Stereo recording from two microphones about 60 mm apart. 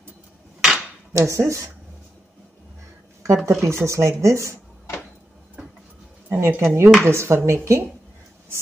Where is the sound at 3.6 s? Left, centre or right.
Right.